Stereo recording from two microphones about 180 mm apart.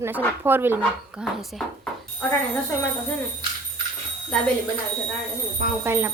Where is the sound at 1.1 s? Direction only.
Centre (ahead or behind).